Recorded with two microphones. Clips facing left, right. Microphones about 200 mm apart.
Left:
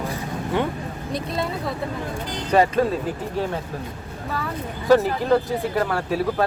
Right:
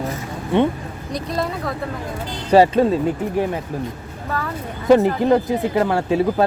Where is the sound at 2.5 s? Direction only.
30° right (ahead or behind).